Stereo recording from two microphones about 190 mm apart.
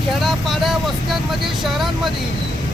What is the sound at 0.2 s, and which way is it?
Vehicle, centre (ahead or behind).